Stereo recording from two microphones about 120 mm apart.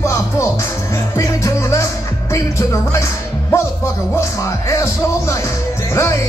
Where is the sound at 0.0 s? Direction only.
25° left (ahead or behind).